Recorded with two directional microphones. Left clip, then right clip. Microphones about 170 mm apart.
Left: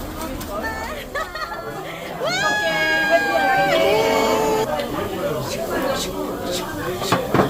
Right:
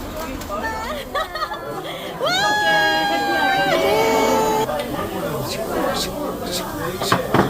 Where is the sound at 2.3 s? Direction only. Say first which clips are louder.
Right 3 dB; 15° right (ahead or behind).